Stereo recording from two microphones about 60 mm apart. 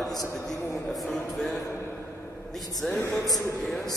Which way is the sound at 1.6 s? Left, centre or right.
Left.